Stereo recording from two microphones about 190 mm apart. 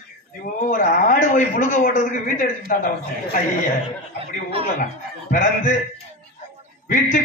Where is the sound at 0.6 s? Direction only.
45° left (ahead or behind).